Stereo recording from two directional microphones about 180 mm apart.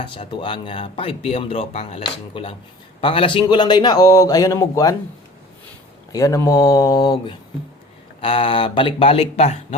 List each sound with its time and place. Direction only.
0.0 s speech: 30° left (ahead or behind)
6.1 s speech: 20° left (ahead or behind); by 9.6 s 35° left (ahead or behind)